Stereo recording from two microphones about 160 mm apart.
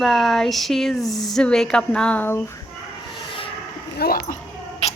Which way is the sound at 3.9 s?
75° left (ahead or behind).